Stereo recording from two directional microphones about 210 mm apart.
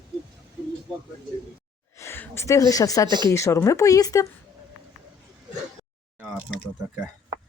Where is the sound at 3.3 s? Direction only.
15° left (ahead or behind).